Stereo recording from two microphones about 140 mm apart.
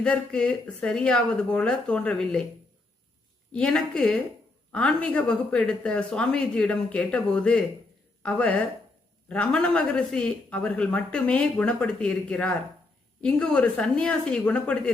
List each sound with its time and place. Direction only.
0.0 s speech: 5° left (ahead or behind)
3.5 s a woman's voice: 5° left (ahead or behind)